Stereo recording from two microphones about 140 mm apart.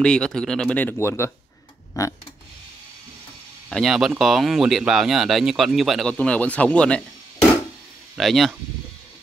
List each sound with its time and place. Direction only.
0.0 s speech: 5° left (ahead or behind)
2.0 s a sound: 25° left (ahead or behind)
3.6 s speech: centre (ahead or behind)
8.2 s speech: centre (ahead or behind)